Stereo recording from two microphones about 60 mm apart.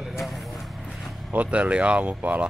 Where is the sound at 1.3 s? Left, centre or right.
Right.